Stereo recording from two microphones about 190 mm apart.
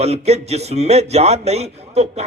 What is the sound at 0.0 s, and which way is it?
Speech, 35° right (ahead or behind).